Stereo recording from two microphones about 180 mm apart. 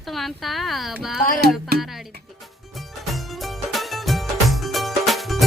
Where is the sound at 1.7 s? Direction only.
60° right (ahead or behind).